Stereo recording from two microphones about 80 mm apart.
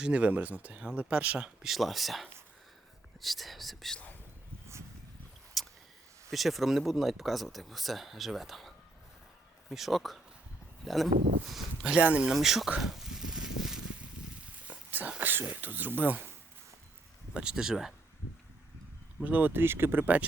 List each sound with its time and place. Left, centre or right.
0.0 s speech: centre
1.6 s speech: centre
5.6 s a sound: centre
6.3 s speech: centre
11.9 s speech: centre
12.3 s a sound: centre
14.8 s a sound: right
15.2 s speech: right
17.3 s speech: centre
19.2 s speech: right